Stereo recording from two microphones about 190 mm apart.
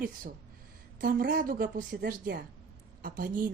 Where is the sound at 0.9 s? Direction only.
50° right (ahead or behind).